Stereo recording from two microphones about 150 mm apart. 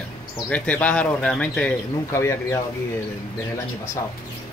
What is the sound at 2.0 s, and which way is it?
Speech, 20° left (ahead or behind).